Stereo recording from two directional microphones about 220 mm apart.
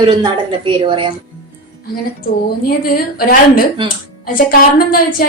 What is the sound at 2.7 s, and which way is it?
A woman's voice, 40° left (ahead or behind).